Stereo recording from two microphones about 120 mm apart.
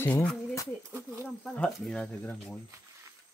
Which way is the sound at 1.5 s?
5° left (ahead or behind).